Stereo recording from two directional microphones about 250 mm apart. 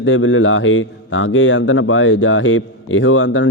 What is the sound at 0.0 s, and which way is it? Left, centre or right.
A man's voice, left.